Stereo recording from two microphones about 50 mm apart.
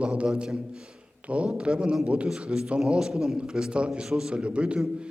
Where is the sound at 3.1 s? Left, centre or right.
Centre.